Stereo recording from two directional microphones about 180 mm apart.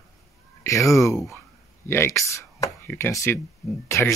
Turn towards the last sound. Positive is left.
turn(degrees=15)  # may be behind; listen again after turning